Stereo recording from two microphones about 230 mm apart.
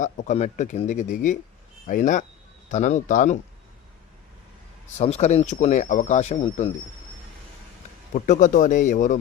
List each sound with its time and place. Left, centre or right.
0.0 s speech: left
4.9 s speech: left
8.1 s speech: left